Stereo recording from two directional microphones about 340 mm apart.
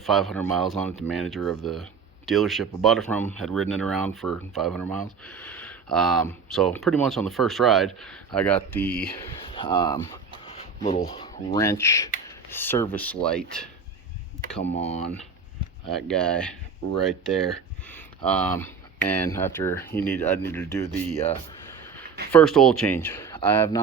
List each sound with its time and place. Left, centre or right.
0.0 s speech: centre
9.5 s speech: centre
14.7 s speech: centre
15.9 s speech: centre
22.3 s speech: centre